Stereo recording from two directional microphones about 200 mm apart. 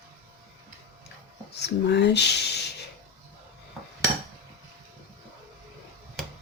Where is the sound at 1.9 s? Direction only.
55° left (ahead or behind).